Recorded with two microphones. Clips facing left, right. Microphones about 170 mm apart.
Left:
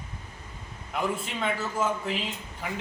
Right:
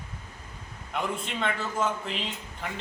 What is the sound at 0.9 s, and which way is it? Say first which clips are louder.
A man's voice: left 2 dB; 5° left (ahead or behind).